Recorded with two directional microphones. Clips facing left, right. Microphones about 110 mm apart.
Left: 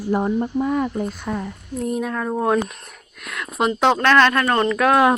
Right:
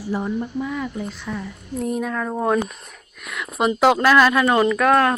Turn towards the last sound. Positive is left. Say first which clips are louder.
# even
turn(degrees=0)  # may be behind; listen again after turning